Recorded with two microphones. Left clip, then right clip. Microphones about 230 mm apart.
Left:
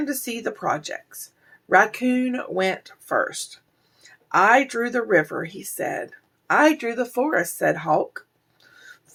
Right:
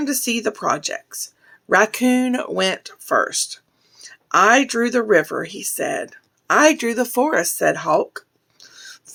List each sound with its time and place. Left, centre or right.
0.0 s speech: right
4.3 s speech: right